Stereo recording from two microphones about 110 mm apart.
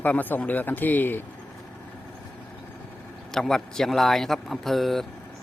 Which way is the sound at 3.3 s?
5° left (ahead or behind).